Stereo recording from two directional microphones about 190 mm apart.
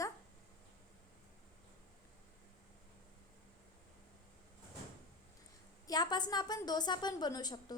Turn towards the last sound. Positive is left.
turn(degrees=20)  # may be behind; listen again after turning